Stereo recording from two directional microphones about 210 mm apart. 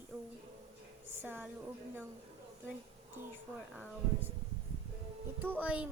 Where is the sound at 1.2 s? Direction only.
10° right (ahead or behind).